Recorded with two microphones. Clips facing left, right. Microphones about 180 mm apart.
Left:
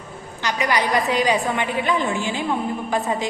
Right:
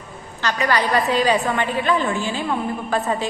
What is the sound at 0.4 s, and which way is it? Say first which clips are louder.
A woman's voice: right 1 dB; 15° left (ahead or behind).